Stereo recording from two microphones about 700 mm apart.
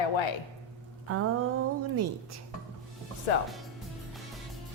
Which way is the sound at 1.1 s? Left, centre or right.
Centre.